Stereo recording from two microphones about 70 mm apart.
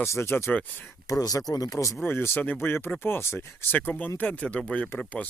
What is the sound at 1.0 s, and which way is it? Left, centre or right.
Speech, left.